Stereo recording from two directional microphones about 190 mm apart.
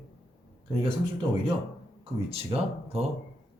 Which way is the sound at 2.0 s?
30° right (ahead or behind).